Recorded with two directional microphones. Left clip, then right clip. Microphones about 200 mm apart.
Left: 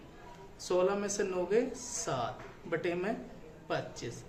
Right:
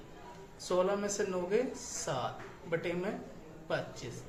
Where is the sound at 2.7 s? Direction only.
50° left (ahead or behind).